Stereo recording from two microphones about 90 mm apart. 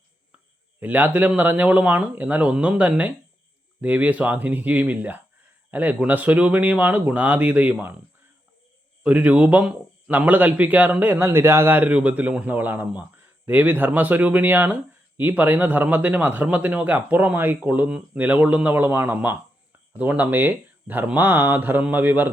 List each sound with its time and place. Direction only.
0.8 s a man's voice: 20° right (ahead or behind)
9.0 s a man's voice: 15° right (ahead or behind)